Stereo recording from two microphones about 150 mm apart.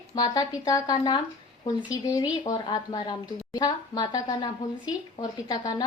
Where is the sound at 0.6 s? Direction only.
25° left (ahead or behind).